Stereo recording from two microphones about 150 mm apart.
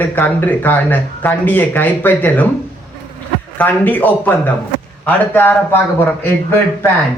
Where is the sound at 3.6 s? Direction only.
10° left (ahead or behind).